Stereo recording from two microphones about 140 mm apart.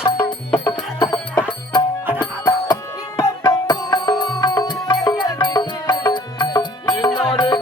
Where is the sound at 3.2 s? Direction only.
25° left (ahead or behind).